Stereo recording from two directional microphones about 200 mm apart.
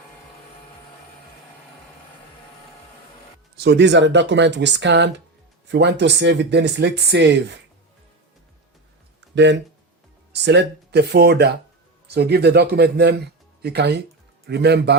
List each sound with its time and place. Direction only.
3.6 s speech: 60° right (ahead or behind)
9.3 s speech: 60° right (ahead or behind)